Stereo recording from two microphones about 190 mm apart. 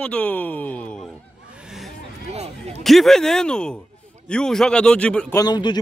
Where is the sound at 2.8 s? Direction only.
Centre (ahead or behind).